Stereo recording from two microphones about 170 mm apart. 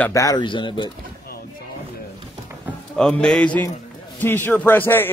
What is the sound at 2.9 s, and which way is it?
A man's voice, 5° left (ahead or behind).